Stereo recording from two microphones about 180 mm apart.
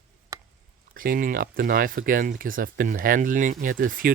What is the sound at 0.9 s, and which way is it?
Speech, 50° right (ahead or behind).